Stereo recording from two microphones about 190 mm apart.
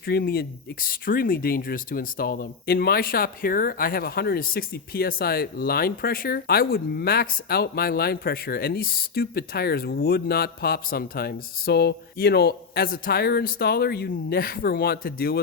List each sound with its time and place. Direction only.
0.0 s speech: 55° left (ahead or behind)